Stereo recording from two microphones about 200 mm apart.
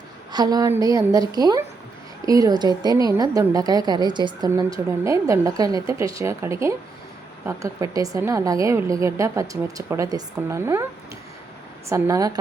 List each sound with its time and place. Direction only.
0.3 s a woman's voice: 20° right (ahead or behind)
11.9 s a woman's voice: 15° right (ahead or behind)